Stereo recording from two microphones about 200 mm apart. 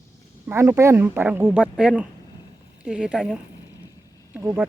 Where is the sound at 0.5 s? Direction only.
15° right (ahead or behind).